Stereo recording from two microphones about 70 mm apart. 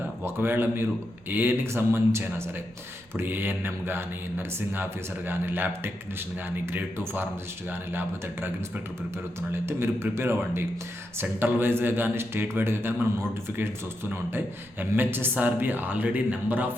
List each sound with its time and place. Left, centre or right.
0.3 s speech: right
7.7 s speech: right
9.6 s speech: right